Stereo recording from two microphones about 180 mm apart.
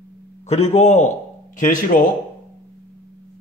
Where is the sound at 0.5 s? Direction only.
35° left (ahead or behind).